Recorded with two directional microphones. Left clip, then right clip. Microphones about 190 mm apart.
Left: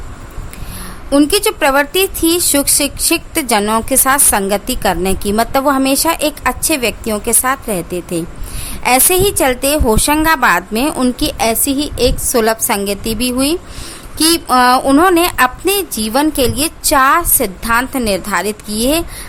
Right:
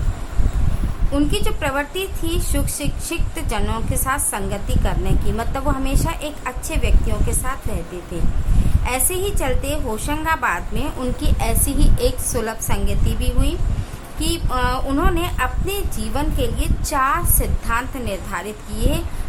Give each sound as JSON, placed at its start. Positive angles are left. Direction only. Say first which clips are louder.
{"t": 1.1, "sound": "a woman's voice", "louder": "left 10 dB", "side_deg": 45}
{"t": 8.8, "sound": "a woman's voice", "louder": "left 12 dB", "side_deg": 45}